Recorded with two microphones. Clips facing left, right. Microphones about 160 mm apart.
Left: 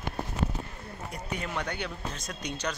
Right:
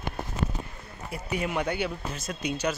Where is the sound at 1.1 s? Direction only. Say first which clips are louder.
Right 6 dB; 5° right (ahead or behind).